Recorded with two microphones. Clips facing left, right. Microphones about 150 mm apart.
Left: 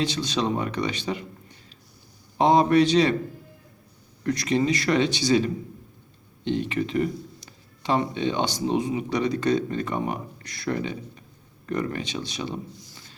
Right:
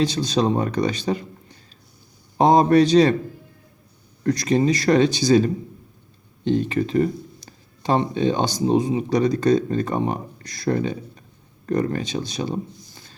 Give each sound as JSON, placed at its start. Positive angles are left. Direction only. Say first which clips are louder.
{"t": 0.0, "sound": "speech", "louder": "right 5 dB", "side_deg": -40}
{"t": 2.4, "sound": "speech", "louder": "right 3 dB", "side_deg": -40}
{"t": 4.2, "sound": "speech", "louder": "right 4 dB", "side_deg": -40}